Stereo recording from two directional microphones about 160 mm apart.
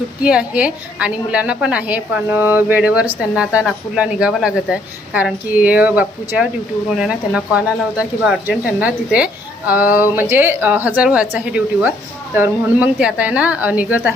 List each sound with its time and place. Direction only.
0.2 s speech: 5° right (ahead or behind)